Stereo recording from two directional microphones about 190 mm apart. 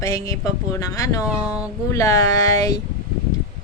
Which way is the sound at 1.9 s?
15° left (ahead or behind).